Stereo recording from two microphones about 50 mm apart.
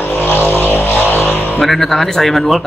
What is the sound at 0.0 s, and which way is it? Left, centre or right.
Vehicle, left.